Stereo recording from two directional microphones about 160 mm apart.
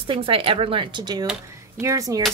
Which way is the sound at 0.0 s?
35° right (ahead or behind).